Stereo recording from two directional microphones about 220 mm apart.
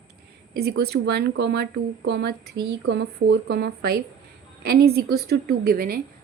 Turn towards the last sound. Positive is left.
turn(degrees=-45)  # may be behind; listen again after turning